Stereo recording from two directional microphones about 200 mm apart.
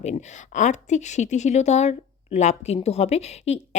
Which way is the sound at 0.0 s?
35° left (ahead or behind).